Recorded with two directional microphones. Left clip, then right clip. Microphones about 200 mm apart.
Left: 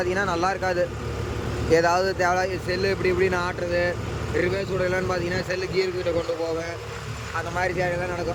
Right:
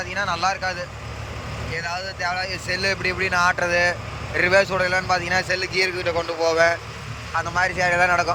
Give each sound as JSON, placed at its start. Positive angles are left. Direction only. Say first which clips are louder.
{"t": 0.0, "sound": "speech", "louder": "right 1 dB", "side_deg": 15}
{"t": 7.9, "sound": "speech", "louder": "right 10 dB", "side_deg": -45}